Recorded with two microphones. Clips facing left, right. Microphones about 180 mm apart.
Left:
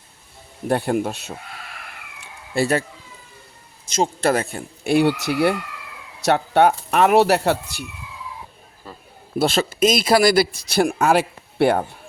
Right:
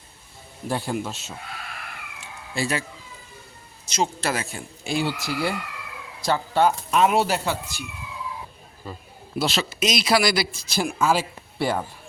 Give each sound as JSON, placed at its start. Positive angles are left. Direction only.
{"t": 0.7, "sound": "speech", "side_deg": 60}
{"t": 2.2, "sound": "a sound", "side_deg": 55}
{"t": 3.9, "sound": "speech", "side_deg": 50}
{"t": 9.4, "sound": "speech", "side_deg": 50}